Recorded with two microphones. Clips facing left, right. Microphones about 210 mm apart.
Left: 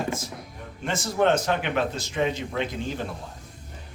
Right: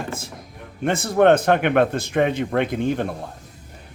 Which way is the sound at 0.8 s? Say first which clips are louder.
Right 7 dB; 60° right (ahead or behind).